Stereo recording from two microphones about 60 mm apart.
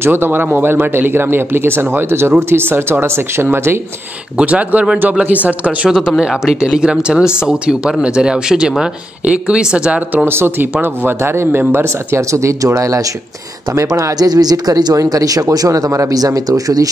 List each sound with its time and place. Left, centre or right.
0.0 s speech: right
4.4 s speech: right
5.9 s speech: centre
10.2 s speech: right
12.3 s speech: right